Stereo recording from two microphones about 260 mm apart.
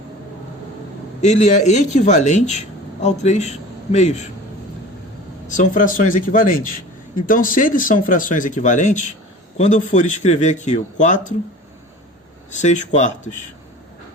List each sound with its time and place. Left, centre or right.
1.2 s speech: left
5.5 s a man's voice: left
12.6 s speech: left